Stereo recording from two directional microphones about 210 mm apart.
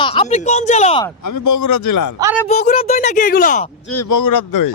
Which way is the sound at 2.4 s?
35° left (ahead or behind).